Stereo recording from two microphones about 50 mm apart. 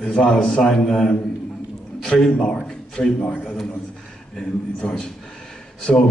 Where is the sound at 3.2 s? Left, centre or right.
Left.